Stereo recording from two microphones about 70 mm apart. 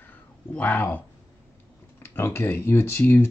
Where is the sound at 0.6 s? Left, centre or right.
Left.